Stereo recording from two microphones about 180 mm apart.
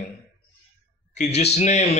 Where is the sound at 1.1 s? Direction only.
40° left (ahead or behind).